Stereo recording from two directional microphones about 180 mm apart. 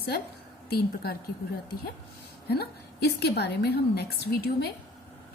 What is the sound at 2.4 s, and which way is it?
A woman's voice, 60° left (ahead or behind).